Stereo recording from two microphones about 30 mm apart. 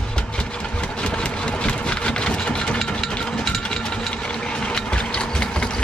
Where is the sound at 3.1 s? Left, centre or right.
Left.